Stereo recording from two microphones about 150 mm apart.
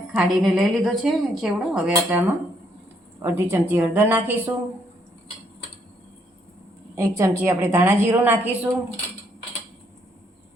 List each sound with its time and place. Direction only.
0.1 s a woman's voice: centre (ahead or behind)
6.9 s speech: 15° right (ahead or behind)